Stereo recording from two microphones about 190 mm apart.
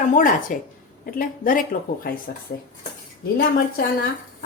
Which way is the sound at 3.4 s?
50° left (ahead or behind).